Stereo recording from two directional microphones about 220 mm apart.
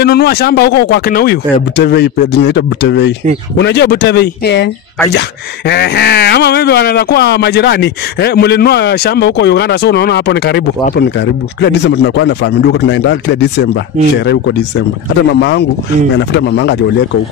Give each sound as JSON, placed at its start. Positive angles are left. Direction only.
{"t": 0.0, "sound": "speech", "side_deg": 45}
{"t": 5.7, "sound": "speech", "side_deg": 50}
{"t": 16.2, "sound": "speech", "side_deg": 50}